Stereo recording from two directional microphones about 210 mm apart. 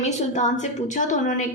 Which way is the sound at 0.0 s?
35° left (ahead or behind).